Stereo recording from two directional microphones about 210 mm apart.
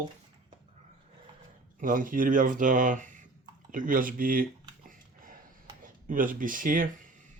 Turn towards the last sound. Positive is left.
turn(degrees=-40)  # may be behind; listen again after turning